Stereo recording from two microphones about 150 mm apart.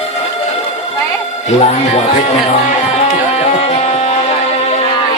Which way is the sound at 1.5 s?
40° left (ahead or behind).